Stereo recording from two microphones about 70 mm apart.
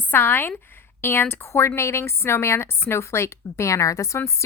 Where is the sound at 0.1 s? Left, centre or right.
Left.